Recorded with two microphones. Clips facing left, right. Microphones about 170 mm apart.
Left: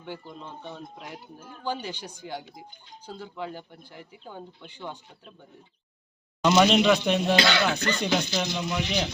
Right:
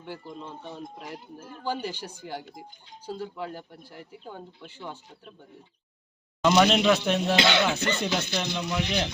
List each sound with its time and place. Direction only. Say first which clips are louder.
0.0 s speech: even; 5° right (ahead or behind)
1.6 s speech: right 1 dB; 10° right (ahead or behind)
6.4 s speech: left 1 dB; centre (ahead or behind)
7.3 s music: even; 20° right (ahead or behind)
8.0 s speech: left 2 dB; centre (ahead or behind)